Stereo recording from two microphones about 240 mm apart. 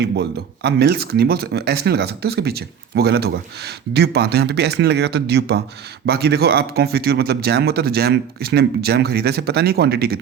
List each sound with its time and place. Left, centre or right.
0.0 s speech: right